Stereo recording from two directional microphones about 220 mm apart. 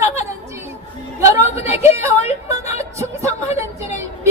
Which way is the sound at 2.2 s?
30° left (ahead or behind).